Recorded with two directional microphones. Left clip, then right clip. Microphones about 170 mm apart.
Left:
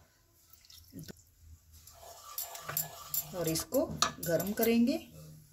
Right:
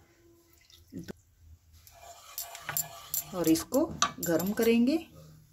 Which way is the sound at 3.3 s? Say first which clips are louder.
Right 5 dB; 45° right (ahead or behind).